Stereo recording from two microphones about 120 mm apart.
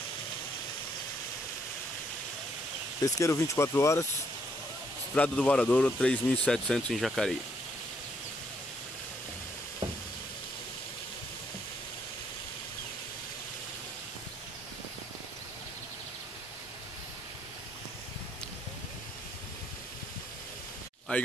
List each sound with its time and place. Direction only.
3.0 s speech: 25° left (ahead or behind)
5.1 s speech: 10° left (ahead or behind)
21.1 s a sound: 15° left (ahead or behind)